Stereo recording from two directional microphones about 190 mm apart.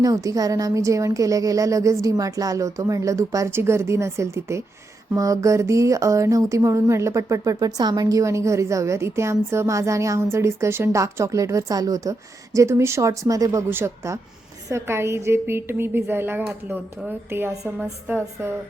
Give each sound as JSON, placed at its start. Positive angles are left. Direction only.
{"t": 0.0, "sound": "speech", "side_deg": -20}